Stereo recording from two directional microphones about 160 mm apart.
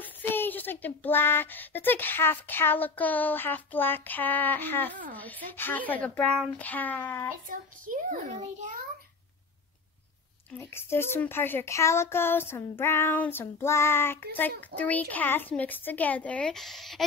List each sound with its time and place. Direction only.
0.0 s speech: 10° left (ahead or behind)
7.4 s a child's voice: 60° right (ahead or behind)
10.6 s speech: 15° left (ahead or behind)